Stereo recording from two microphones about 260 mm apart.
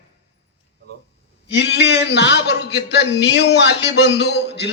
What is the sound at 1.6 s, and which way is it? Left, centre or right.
A man's voice, left.